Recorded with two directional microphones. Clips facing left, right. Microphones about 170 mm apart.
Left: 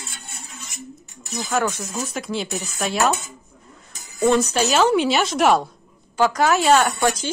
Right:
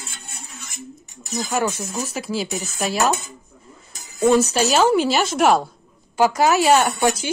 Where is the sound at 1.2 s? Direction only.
40° right (ahead or behind).